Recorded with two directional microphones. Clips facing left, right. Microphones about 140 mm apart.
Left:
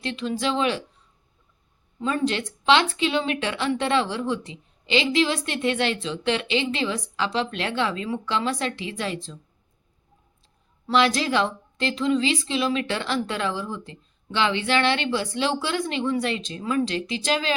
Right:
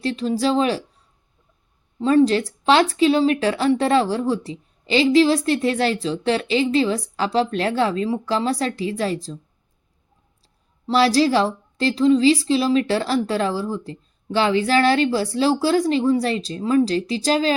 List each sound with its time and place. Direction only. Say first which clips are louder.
0.0 s speech: right 6 dB; 35° right (ahead or behind)
2.0 s speech: right 9 dB; 35° right (ahead or behind)
10.4 s speech: right 6 dB; 35° right (ahead or behind)